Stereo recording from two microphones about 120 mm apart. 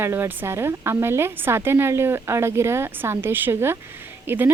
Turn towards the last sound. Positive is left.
turn(degrees=-15)  # may be behind; listen again after turning